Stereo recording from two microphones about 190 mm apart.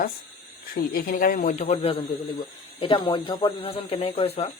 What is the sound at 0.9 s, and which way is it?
Speech, 50° left (ahead or behind).